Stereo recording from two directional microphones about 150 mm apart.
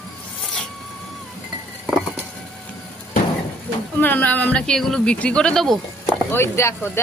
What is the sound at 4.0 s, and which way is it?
Speech, 10° left (ahead or behind).